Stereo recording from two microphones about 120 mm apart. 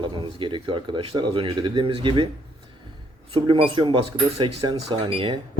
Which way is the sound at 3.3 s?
50° right (ahead or behind).